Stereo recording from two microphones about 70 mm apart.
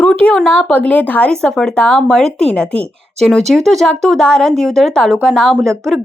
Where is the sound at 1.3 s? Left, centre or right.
Centre.